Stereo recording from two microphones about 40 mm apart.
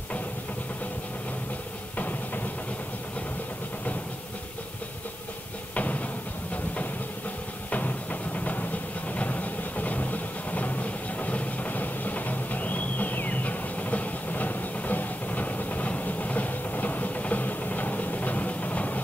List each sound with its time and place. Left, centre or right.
2.0 s vehicle: left
5.8 s a sound: left
7.7 s music: left